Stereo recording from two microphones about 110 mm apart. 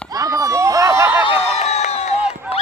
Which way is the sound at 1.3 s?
80° left.